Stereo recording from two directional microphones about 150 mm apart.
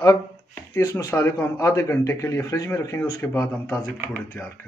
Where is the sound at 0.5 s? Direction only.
20° left (ahead or behind).